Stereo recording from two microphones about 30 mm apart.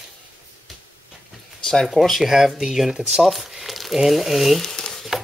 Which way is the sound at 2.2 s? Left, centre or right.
Centre.